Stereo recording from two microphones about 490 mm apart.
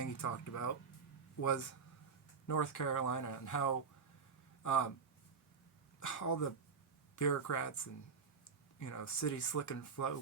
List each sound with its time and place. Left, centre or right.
0.0 s speech: left
2.5 s speech: left
6.0 s speech: left